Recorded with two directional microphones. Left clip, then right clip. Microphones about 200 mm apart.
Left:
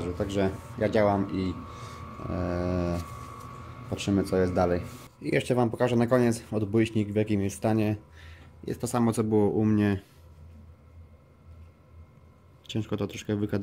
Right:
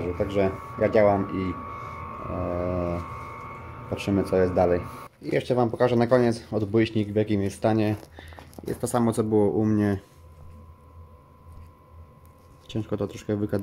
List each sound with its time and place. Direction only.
0.0 s speech: 5° left (ahead or behind)
2.3 s speech: 20° left (ahead or behind)
3.9 s speech: 5° left (ahead or behind)
12.6 s speech: 5° left (ahead or behind)